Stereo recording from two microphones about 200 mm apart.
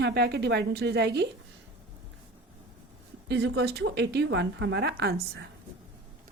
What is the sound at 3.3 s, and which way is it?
A woman's voice, 60° right (ahead or behind).